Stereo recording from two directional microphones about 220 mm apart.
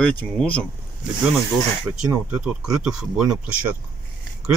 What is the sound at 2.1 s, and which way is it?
Speech, 10° right (ahead or behind).